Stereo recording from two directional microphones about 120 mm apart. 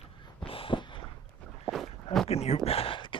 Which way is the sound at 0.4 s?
50° left (ahead or behind).